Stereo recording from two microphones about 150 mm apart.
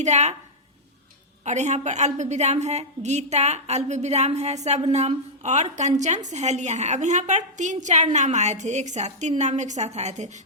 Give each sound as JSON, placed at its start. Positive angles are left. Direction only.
{"t": 0.0, "sound": "a woman's voice", "side_deg": -50}
{"t": 1.5, "sound": "a woman's voice", "side_deg": -50}